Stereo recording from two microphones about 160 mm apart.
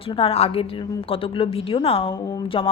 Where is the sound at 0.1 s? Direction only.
35° left (ahead or behind).